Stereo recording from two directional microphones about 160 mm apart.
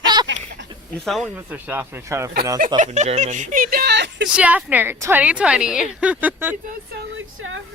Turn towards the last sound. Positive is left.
turn(degrees=-10)  # may be behind; listen again after turning